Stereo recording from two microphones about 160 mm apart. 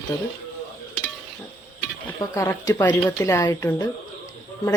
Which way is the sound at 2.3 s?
20° left (ahead or behind).